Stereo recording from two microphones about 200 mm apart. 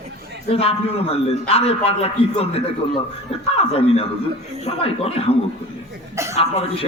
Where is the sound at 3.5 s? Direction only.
30° left (ahead or behind).